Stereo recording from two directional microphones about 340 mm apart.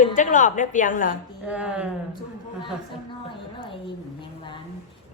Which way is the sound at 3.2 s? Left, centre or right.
Centre.